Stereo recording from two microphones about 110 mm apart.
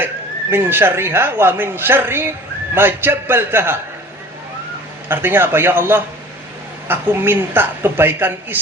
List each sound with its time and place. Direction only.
0.5 s a woman's voice: 20° right (ahead or behind)
5.0 s a woman's voice: 20° right (ahead or behind)